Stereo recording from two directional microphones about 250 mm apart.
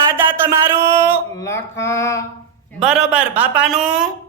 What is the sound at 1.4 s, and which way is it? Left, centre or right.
Speech, centre.